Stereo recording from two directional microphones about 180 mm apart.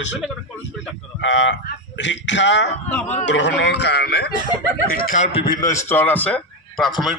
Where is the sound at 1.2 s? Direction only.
90° left.